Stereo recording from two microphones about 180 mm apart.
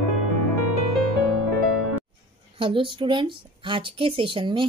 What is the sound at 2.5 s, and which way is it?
Speech, 30° right (ahead or behind).